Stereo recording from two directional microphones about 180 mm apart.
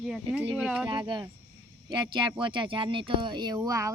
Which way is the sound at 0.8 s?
25° right (ahead or behind).